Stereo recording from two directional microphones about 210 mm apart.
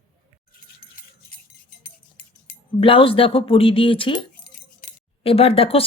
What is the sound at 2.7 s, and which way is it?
Speech, 25° left (ahead or behind).